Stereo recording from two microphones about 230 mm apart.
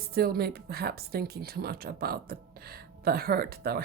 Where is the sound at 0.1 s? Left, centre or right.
Right.